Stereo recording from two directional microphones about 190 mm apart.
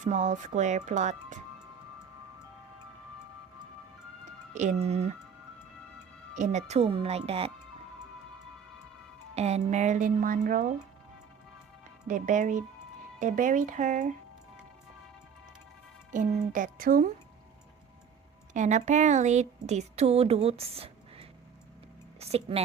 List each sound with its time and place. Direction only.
0.0 s a woman's voice: 40° right (ahead or behind)
4.5 s a woman's voice: 35° right (ahead or behind)
6.3 s a woman's voice: 40° right (ahead or behind)
9.3 s a woman's voice: 35° right (ahead or behind)
12.0 s a woman's voice: 40° right (ahead or behind)
16.1 s a woman's voice: 40° right (ahead or behind)
18.5 s a woman's voice: 40° right (ahead or behind)